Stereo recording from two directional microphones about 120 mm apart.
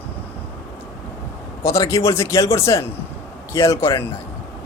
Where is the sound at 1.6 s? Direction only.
25° left (ahead or behind).